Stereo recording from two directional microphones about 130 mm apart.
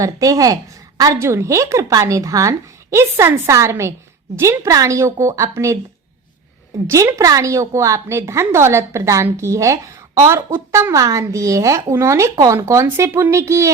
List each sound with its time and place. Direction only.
0.0 s a woman's voice: 25° right (ahead or behind)
6.8 s a woman's voice: 20° right (ahead or behind)